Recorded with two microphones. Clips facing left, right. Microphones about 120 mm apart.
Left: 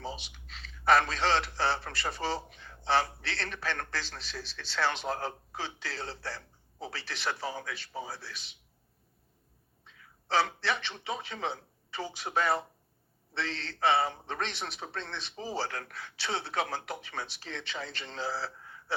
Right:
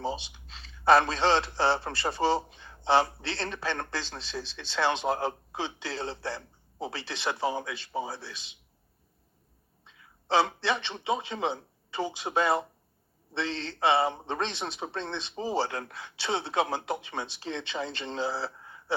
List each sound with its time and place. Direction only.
0.0 s speech: 30° right (ahead or behind)
10.2 s speech: 25° right (ahead or behind)